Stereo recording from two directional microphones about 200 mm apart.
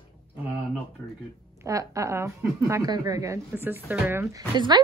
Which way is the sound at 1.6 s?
15° right (ahead or behind).